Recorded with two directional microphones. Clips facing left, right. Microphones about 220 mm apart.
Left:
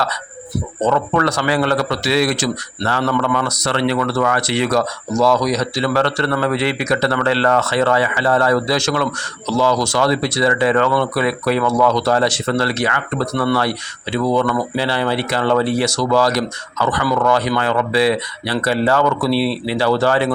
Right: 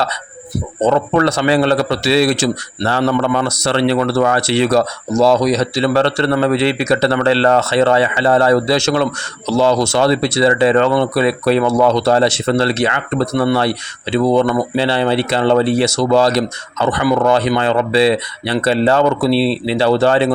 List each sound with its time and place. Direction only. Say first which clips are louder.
0.8 s a man's voice: right 4 dB; 25° right (ahead or behind)